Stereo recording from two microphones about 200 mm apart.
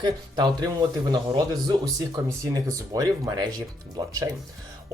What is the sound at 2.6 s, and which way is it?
Speech, 20° right (ahead or behind).